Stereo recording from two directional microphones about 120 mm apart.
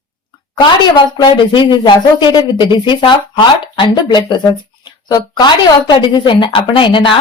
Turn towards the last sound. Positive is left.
turn(degrees=45)  # may be behind; listen again after turning